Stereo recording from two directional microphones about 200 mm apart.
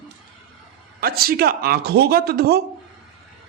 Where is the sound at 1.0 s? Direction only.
50° right (ahead or behind).